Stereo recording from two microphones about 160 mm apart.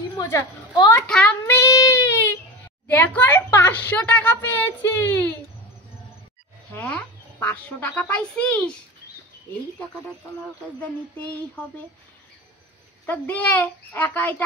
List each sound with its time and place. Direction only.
0.2 s a woman's voice: 25° left (ahead or behind)
0.9 s speech: 5° left (ahead or behind)
1.4 s child singing: 20° left (ahead or behind)
2.9 s speech: 10° left (ahead or behind)
6.7 s speech: 10° left (ahead or behind)
10.8 s speech: 10° left (ahead or behind)
13.0 s speech: 10° left (ahead or behind)